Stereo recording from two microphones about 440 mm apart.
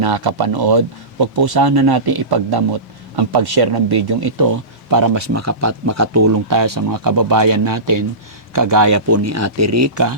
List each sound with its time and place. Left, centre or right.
0.0 s speech: right